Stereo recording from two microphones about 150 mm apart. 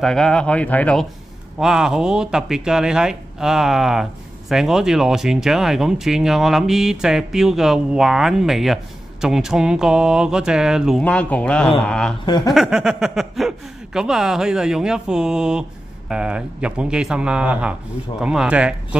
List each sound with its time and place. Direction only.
0.0 s speech: 5° left (ahead or behind)
1.6 s speech: 5° right (ahead or behind)
11.0 s speech: 10° left (ahead or behind)
12.3 s speech: 25° left (ahead or behind)
12.5 s speech: 5° right (ahead or behind)